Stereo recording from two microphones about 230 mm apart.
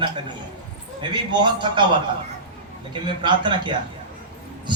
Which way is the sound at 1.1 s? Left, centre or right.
Centre.